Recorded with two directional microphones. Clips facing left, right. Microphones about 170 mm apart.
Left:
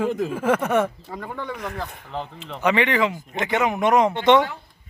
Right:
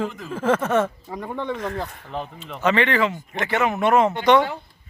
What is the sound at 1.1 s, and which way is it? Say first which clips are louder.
Speech: right 3 dB; 15° right (ahead or behind).